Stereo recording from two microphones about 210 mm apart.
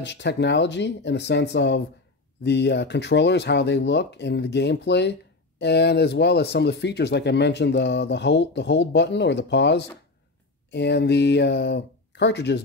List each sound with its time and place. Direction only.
0.0 s speech: 55° left (ahead or behind)